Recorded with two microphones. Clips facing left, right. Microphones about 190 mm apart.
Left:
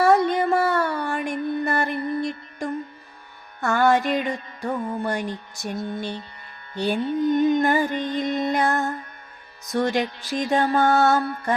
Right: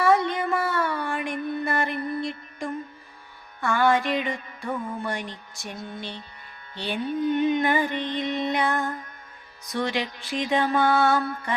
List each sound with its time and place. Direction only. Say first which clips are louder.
0.0 s mantra: left 4 dB; 40° left (ahead or behind)
3.6 s music: left 2 dB; 45° left (ahead or behind)